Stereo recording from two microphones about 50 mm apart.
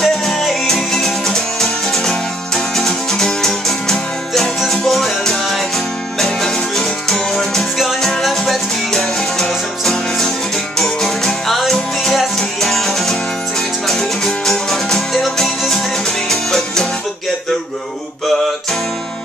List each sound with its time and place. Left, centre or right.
0.0 s music: centre
7.7 s music: centre
18.3 s music: centre